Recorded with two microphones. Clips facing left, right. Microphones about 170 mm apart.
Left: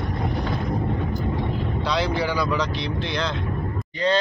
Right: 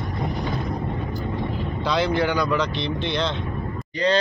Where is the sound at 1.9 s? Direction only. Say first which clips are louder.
Right 3 dB; centre (ahead or behind).